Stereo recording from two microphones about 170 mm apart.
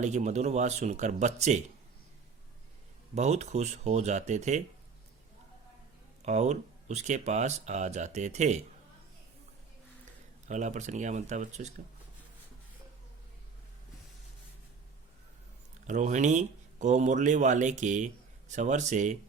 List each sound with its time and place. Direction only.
0.0 s speech: 45° right (ahead or behind)
3.2 s speech: 40° right (ahead or behind)
6.2 s speech: 40° right (ahead or behind)
10.5 s speech: 45° right (ahead or behind)
15.9 s speech: 45° right (ahead or behind)